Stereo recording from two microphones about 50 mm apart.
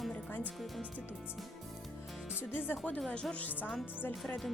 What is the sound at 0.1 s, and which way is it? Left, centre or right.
Music, left.